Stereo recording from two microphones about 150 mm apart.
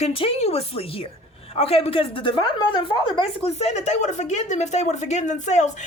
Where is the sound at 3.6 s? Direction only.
50° left (ahead or behind).